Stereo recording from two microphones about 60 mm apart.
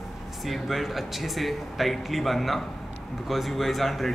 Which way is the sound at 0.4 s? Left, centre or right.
Centre.